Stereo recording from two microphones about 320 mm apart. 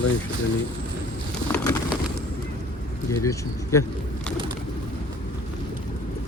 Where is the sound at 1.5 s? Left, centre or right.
Centre.